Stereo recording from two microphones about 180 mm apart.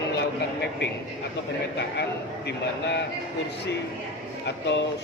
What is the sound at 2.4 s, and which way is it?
Speech, 70° left (ahead or behind).